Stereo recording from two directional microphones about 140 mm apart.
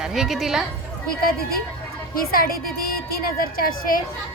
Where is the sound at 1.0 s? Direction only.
90° left.